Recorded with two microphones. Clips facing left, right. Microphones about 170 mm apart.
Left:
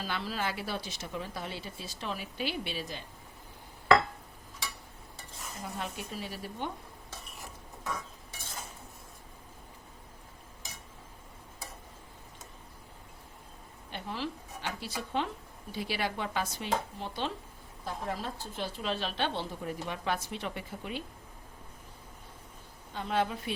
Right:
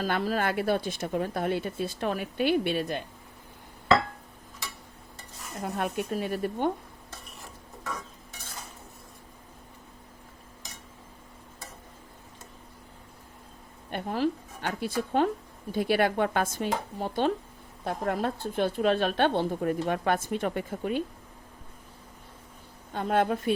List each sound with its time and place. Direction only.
0.0 s speech: 45° right (ahead or behind)
5.6 s speech: 55° right (ahead or behind)
13.9 s a woman's voice: 50° right (ahead or behind)
17.8 s a woman's voice: 60° right (ahead or behind)
23.0 s a woman's voice: 50° right (ahead or behind)